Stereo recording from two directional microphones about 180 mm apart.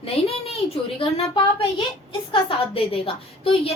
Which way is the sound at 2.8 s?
30° left (ahead or behind).